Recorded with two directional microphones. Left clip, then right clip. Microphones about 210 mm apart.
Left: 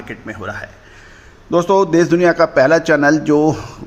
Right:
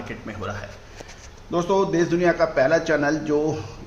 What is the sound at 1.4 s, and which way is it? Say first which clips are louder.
A man's voice: left 8 dB; 45° left (ahead or behind).